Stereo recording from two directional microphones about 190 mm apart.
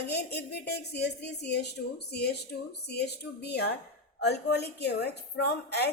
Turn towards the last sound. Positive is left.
turn(degrees=60)  # may be behind; listen again after turning